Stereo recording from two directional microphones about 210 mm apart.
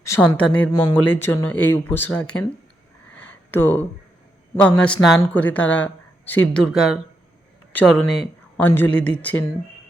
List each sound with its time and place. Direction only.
0.2 s speech: 5° left (ahead or behind)
0.7 s speech: 20° left (ahead or behind)
0.9 s speech: 10° left (ahead or behind)
3.1 s a sound: 5° left (ahead or behind)
4.8 s speech: 5° left (ahead or behind)